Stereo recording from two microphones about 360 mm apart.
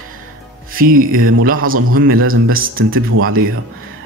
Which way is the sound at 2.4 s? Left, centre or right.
Right.